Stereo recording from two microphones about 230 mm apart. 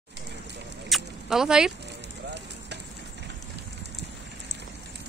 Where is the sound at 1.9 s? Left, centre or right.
Right.